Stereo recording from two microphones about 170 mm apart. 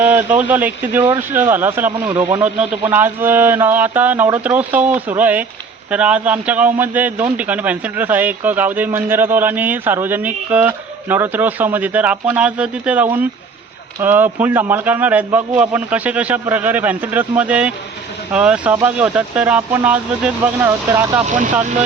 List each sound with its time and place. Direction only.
0.0 s a man's voice: 10° right (ahead or behind)
21.2 s speech: 45° right (ahead or behind)